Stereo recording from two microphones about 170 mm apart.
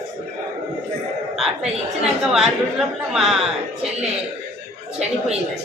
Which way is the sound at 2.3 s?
Centre (ahead or behind).